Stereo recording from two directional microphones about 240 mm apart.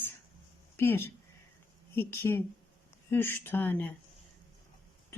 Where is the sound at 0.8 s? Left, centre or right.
Centre.